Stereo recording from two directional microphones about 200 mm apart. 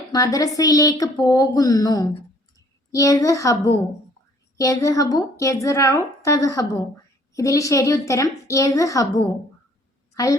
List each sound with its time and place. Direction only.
0.1 s a woman's voice: 15° left (ahead or behind)